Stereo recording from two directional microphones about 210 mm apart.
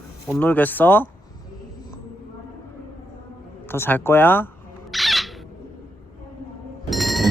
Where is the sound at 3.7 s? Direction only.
10° left (ahead or behind).